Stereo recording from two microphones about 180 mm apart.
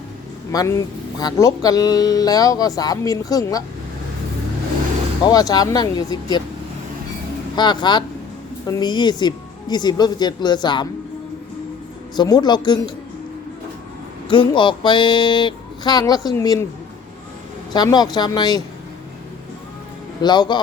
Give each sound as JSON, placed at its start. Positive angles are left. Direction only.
{"t": 0.5, "sound": "speech", "side_deg": 20}
{"t": 5.2, "sound": "speech", "side_deg": 20}
{"t": 7.5, "sound": "speech", "side_deg": 25}
{"t": 12.1, "sound": "speech", "side_deg": 25}
{"t": 14.3, "sound": "speech", "side_deg": 25}
{"t": 17.7, "sound": "speech", "side_deg": 20}
{"t": 20.2, "sound": "speech", "side_deg": 25}